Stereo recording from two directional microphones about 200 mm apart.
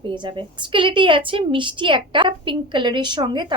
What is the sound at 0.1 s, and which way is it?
A woman's voice, 25° right (ahead or behind).